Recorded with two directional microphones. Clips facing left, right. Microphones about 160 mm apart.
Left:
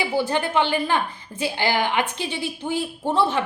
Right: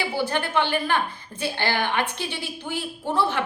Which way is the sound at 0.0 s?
15° left (ahead or behind).